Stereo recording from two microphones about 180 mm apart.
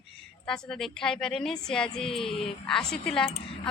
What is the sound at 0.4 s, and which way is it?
A woman's voice, 5° left (ahead or behind).